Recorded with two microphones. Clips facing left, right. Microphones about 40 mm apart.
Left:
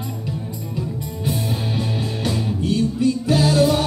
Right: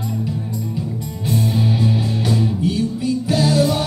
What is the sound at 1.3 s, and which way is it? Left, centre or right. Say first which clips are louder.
Music: right 5 dB; centre.